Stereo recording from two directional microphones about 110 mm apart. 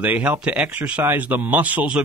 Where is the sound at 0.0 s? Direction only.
15° right (ahead or behind).